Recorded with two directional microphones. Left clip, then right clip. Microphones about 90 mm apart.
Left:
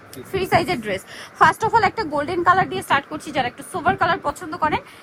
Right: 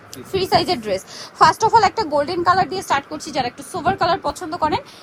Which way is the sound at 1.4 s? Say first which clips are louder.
Right 3 dB; 25° right (ahead or behind).